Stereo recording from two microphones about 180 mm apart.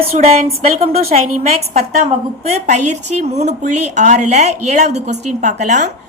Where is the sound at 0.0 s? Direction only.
35° right (ahead or behind).